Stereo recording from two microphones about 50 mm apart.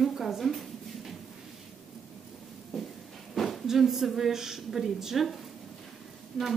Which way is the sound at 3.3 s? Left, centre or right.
Centre.